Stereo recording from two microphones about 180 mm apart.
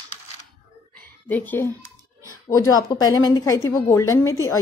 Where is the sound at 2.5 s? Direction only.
20° left (ahead or behind).